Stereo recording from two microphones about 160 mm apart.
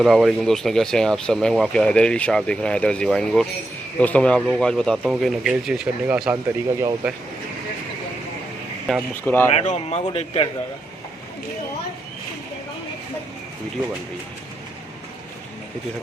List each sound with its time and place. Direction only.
0.0 s speech: centre (ahead or behind)
6.3 s speech: 15° right (ahead or behind)
8.9 s speech: 5° left (ahead or behind)
9.5 s speech: 40° left (ahead or behind)